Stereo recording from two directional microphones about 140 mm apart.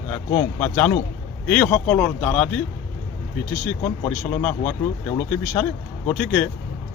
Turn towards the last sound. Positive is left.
turn(degrees=10)  # may be behind; listen again after turning